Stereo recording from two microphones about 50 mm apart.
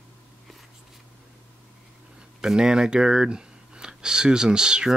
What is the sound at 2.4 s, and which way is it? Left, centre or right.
Speech, centre.